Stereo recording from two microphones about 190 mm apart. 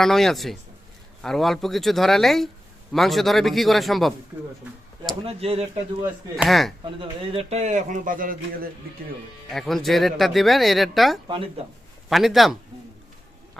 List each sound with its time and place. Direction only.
0.0 s speech: centre (ahead or behind)
5.2 s speech: 30° right (ahead or behind)
6.3 s speech: centre (ahead or behind)
6.8 s speech: 30° right (ahead or behind); by 8.4 s 45° right (ahead or behind)
9.5 s speech: centre (ahead or behind)
11.3 s speech: 30° right (ahead or behind)
12.0 s speech: centre (ahead or behind)